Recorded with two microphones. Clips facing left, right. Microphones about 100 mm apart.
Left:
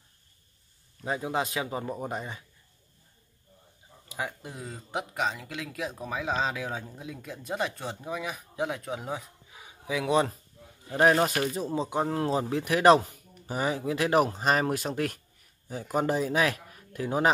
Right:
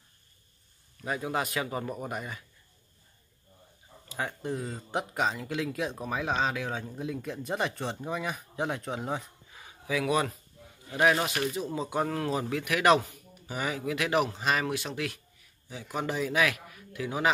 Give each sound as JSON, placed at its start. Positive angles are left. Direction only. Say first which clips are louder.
{"t": 1.0, "sound": "speech", "louder": "left 1 dB", "side_deg": 20}
{"t": 4.1, "sound": "speech", "louder": "right 3 dB", "side_deg": 10}
{"t": 9.8, "sound": "speech", "louder": "left 2 dB", "side_deg": 25}
{"t": 10.9, "sound": "speech", "louder": "left 3 dB", "side_deg": 35}